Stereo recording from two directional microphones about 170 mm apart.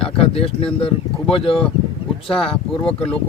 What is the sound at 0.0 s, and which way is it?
Speech, 35° left (ahead or behind).